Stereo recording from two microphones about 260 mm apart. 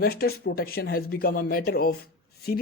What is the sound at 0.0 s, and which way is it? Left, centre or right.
Speech, left.